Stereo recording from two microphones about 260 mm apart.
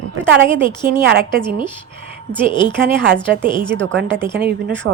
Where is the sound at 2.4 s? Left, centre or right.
Centre.